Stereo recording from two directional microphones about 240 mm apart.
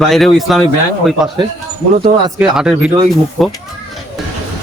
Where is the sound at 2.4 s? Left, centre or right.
Centre.